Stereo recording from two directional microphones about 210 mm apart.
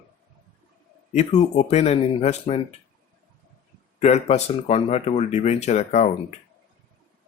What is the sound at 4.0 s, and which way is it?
Speech, 30° left (ahead or behind).